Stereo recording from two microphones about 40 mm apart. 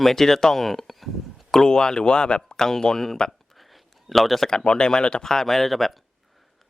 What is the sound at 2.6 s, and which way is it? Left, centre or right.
Speech, centre.